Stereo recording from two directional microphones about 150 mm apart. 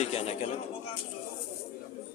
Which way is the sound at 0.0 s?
45° left (ahead or behind).